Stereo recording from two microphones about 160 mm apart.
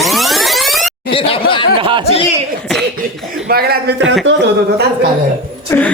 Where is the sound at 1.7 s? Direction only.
30° right (ahead or behind).